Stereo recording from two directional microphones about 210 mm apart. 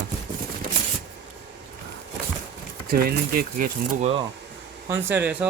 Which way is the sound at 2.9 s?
45° right (ahead or behind).